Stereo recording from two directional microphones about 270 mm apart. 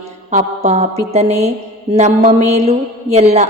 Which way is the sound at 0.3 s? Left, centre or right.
Right.